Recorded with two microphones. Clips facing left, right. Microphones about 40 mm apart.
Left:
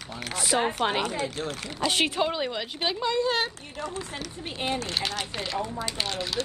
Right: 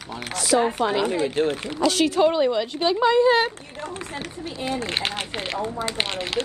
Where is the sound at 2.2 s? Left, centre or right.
Centre.